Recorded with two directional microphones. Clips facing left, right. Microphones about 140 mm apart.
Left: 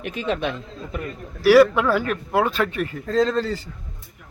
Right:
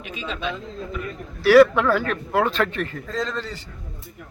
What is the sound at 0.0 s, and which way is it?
Speech, 60° left (ahead or behind).